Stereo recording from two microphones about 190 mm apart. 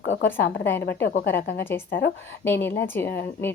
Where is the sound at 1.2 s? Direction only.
10° left (ahead or behind).